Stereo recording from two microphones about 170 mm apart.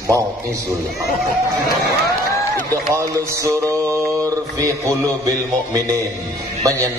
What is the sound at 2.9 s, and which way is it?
Mantra, 15° right (ahead or behind).